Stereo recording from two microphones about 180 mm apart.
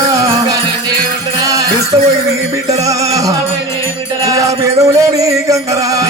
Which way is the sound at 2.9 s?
20° right (ahead or behind).